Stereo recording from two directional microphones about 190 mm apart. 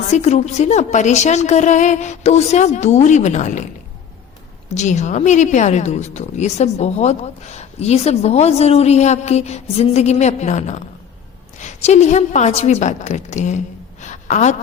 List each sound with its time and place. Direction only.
0.1 s a woman's voice: 35° left (ahead or behind)
4.7 s a woman's voice: 35° left (ahead or behind)
14.0 s a sound: 40° left (ahead or behind)